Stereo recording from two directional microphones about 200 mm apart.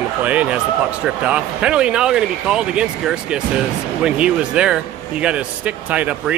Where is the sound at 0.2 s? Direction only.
5° right (ahead or behind).